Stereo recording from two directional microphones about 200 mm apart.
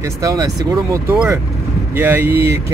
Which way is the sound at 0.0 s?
15° right (ahead or behind).